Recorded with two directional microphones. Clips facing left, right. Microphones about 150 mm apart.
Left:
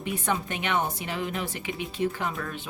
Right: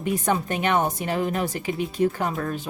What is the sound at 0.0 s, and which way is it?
Speech, 40° right (ahead or behind).